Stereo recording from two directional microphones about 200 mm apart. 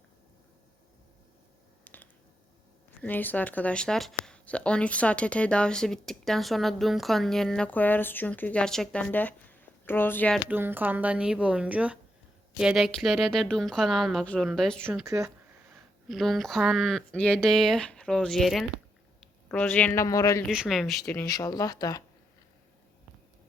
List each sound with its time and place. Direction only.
1.8 s finger snapping: 10° left (ahead or behind)
3.0 s speech: 10° left (ahead or behind)
10.5 s a woman's voice: 10° right (ahead or behind)
14.8 s a woman's voice: 15° right (ahead or behind)
16.0 s speech: centre (ahead or behind); by 20.4 s 15° left (ahead or behind)
20.5 s speech: centre (ahead or behind)
21.2 s speech: 20° left (ahead or behind)